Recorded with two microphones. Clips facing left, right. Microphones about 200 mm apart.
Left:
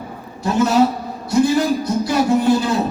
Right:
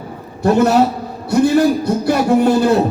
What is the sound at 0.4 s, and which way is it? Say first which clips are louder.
A man's voice: right 3 dB; 60° right (ahead or behind).